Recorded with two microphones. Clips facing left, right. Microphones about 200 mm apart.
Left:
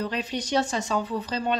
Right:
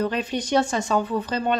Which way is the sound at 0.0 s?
50° right (ahead or behind).